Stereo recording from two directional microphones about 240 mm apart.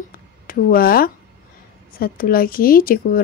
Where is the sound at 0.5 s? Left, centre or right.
Left.